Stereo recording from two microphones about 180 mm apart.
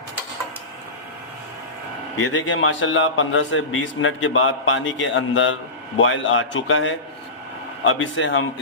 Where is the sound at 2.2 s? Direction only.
90° left.